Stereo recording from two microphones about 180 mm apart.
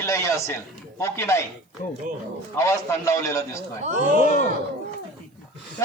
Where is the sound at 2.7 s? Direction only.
15° left (ahead or behind).